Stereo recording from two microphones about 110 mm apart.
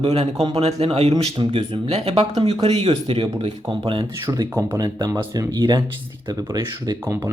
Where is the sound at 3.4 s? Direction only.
45° right (ahead or behind).